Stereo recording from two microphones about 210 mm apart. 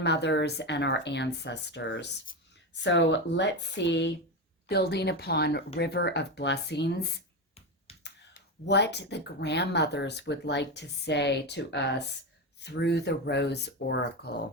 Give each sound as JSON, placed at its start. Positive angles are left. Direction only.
{"t": 0.0, "sound": "speech", "side_deg": 55}